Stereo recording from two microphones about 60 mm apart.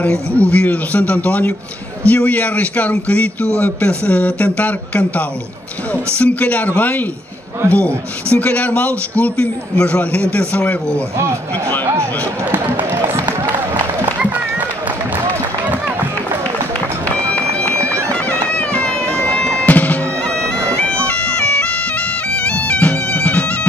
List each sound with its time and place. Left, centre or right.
0.0 s speech: left
17.1 s bagpipes: left